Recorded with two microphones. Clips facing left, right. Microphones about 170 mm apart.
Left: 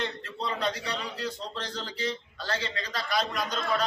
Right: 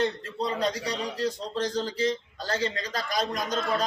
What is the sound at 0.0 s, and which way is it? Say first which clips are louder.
A man's voice: right 6 dB; 40° right (ahead or behind).